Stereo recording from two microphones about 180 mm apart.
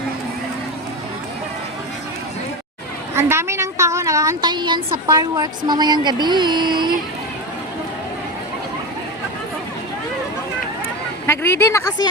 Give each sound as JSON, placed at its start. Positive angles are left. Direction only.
{"t": 3.2, "sound": "a woman's voice", "side_deg": -15}
{"t": 11.3, "sound": "speech", "side_deg": 15}